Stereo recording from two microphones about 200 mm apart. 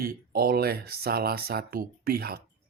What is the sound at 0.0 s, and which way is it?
Speech, 50° right (ahead or behind).